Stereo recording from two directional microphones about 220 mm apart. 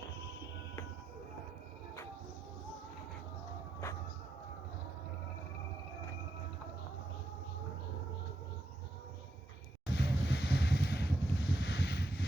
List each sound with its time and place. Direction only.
9.9 s vehicle: 50° left (ahead or behind)